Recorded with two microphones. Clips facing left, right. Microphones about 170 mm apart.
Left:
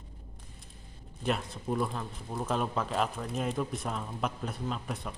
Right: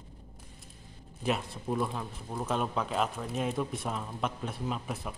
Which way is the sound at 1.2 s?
Centre (ahead or behind).